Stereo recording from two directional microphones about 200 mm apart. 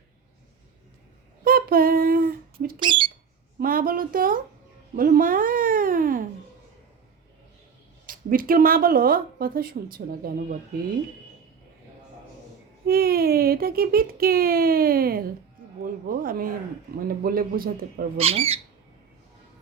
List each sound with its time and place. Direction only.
1.5 s a sound: 45° right (ahead or behind)
2.8 s squawk: 25° right (ahead or behind)
3.6 s speech: 45° right (ahead or behind)
4.9 s a sound: 45° right (ahead or behind)
8.0 s speech: 45° right (ahead or behind)
12.8 s speech: 50° right (ahead or behind)
18.2 s speech: 30° right (ahead or behind)